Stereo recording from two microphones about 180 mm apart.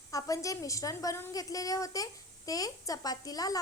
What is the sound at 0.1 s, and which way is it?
A woman's voice, 20° left (ahead or behind).